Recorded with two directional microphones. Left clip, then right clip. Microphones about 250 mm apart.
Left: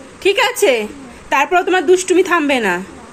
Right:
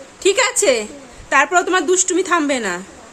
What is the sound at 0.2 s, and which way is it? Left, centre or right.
A woman's voice, centre.